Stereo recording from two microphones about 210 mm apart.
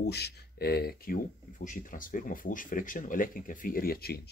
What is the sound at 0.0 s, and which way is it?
Speech, 50° left (ahead or behind).